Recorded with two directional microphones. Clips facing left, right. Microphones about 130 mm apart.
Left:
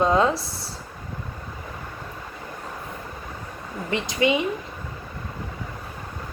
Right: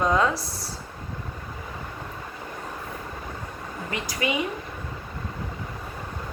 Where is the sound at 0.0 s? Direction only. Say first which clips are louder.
Left 3 dB; 30° left (ahead or behind).